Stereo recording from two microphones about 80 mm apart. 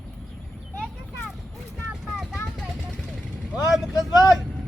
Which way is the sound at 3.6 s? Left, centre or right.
Left.